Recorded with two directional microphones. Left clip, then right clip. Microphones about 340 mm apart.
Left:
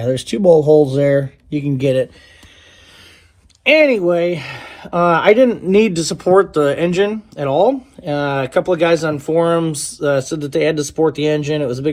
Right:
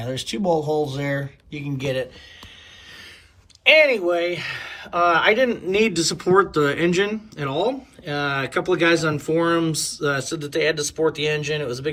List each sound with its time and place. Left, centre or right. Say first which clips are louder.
0.0 s speech: left 11 dB; left
3.7 s speech: left 3 dB; centre